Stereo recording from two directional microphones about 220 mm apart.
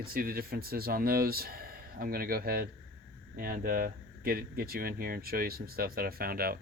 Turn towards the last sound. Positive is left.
turn(degrees=-45)  # may be behind; listen again after turning